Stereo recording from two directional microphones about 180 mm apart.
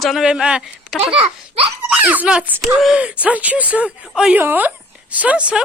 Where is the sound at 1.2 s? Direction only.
35° right (ahead or behind).